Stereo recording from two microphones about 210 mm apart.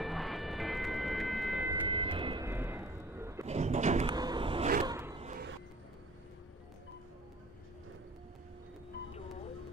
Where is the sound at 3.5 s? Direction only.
35° right (ahead or behind).